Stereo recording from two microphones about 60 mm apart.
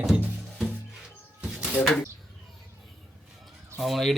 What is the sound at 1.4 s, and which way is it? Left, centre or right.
Bird, centre.